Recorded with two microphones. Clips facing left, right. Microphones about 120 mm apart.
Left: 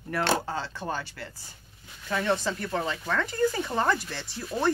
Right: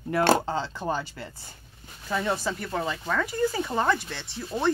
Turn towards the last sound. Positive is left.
turn(degrees=0)  # may be behind; listen again after turning